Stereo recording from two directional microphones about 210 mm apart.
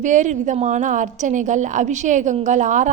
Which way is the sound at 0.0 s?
35° right (ahead or behind).